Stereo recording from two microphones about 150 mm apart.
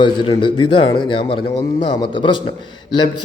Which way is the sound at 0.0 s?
30° left (ahead or behind).